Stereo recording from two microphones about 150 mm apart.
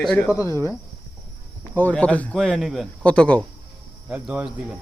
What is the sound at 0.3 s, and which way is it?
A man's voice, 20° left (ahead or behind).